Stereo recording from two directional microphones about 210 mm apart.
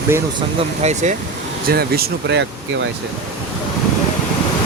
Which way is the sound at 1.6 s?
50° right (ahead or behind).